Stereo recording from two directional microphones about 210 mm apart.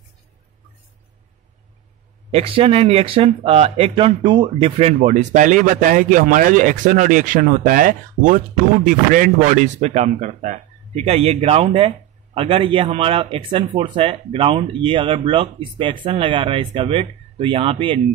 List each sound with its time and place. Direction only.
2.3 s speech: 25° right (ahead or behind)